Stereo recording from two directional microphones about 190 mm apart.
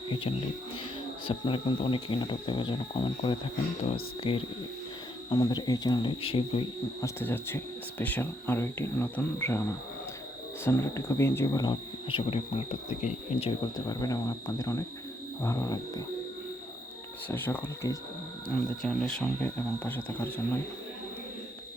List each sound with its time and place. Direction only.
1.3 s speech: 30° left (ahead or behind)
7.0 s speech: 10° left (ahead or behind); by 13.5 s 35° left (ahead or behind)
13.6 s speech: 20° left (ahead or behind)
17.2 s speech: 10° left (ahead or behind)